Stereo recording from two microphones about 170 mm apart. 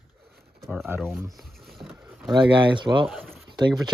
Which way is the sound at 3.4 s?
25° right (ahead or behind).